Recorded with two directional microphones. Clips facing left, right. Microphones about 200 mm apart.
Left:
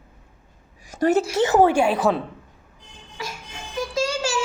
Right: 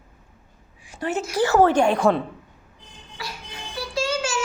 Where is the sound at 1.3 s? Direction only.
20° left (ahead or behind); by 2.2 s 5° left (ahead or behind).